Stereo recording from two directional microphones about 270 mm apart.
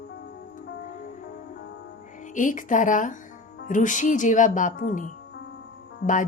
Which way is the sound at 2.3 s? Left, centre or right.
Left.